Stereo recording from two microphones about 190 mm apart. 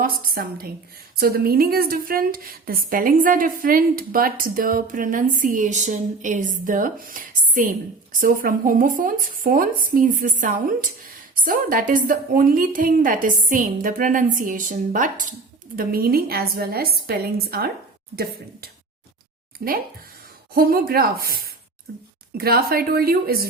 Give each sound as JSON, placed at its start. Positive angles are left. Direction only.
{"t": 0.0, "sound": "a woman's voice", "side_deg": -50}
{"t": 19.5, "sound": "a woman's voice", "side_deg": -50}